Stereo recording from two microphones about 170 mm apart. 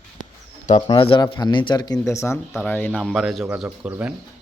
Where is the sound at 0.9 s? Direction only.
30° left (ahead or behind); by 2.9 s 10° left (ahead or behind).